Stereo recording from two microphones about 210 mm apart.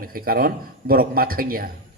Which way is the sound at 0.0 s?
45° right (ahead or behind).